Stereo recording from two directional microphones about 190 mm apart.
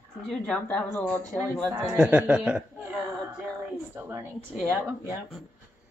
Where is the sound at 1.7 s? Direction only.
20° right (ahead or behind).